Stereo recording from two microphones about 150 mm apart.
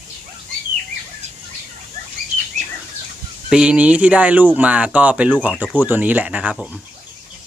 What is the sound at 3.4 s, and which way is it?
Speech, 5° right (ahead or behind).